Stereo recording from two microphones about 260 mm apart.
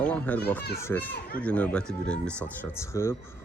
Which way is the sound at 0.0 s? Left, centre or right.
Centre.